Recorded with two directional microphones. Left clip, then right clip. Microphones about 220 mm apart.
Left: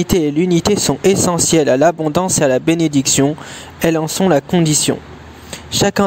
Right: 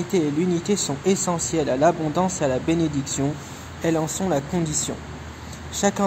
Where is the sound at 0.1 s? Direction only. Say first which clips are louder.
Left 7 dB; 45° left (ahead or behind).